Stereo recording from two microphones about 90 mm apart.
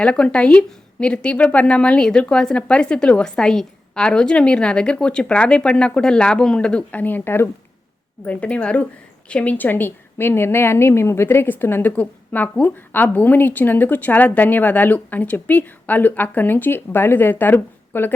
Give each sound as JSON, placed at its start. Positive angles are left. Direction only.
{"t": 0.0, "sound": "a woman's voice", "side_deg": 10}